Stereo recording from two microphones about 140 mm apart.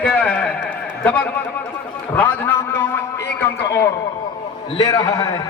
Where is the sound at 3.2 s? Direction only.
20° left (ahead or behind).